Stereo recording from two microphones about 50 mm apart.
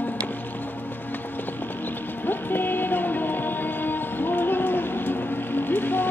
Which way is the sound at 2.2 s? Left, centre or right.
Left.